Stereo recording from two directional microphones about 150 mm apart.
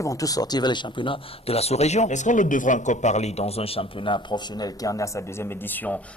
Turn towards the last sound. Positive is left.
turn(degrees=10)  # may be behind; listen again after turning